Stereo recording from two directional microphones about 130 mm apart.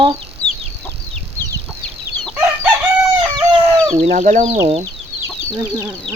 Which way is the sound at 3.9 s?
55° right (ahead or behind).